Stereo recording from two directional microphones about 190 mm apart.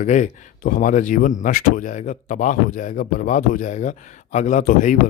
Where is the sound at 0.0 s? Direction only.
40° left (ahead or behind).